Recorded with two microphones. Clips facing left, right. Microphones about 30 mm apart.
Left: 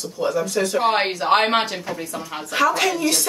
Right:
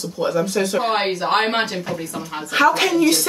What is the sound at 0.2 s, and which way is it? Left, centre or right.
Speech, right.